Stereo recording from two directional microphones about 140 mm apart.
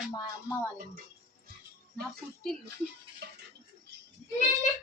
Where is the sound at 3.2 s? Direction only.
90° right.